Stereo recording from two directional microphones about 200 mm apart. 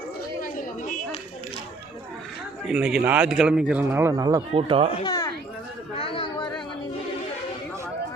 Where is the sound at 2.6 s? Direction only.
5° right (ahead or behind); by 4.9 s 30° right (ahead or behind).